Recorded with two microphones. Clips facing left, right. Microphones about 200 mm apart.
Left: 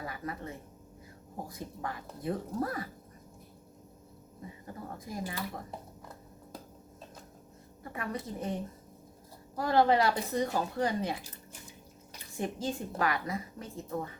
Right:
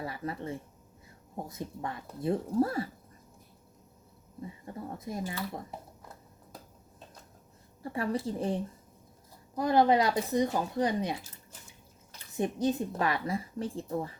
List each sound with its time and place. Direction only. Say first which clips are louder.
0.0 s a woman's voice: right 3 dB; 30° right (ahead or behind)
4.4 s a woman's voice: right 3 dB; 25° right (ahead or behind)
7.8 s a woman's voice: right 6 dB; 30° right (ahead or behind)
9.6 s a woman's voice: right 1 dB; 20° right (ahead or behind)
12.4 s a woman's voice: right 5 dB; 20° right (ahead or behind)